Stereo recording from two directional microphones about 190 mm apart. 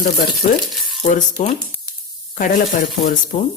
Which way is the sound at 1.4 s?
40° left (ahead or behind).